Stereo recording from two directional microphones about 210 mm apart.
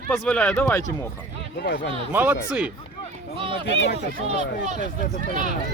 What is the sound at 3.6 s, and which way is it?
Speech, 60° left (ahead or behind).